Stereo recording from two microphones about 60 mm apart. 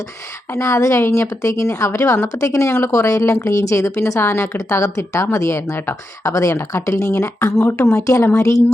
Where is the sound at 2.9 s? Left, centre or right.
Left.